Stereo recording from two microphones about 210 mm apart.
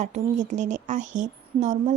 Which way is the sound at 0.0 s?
35° right (ahead or behind).